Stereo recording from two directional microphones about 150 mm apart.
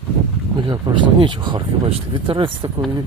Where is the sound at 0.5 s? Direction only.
30° right (ahead or behind).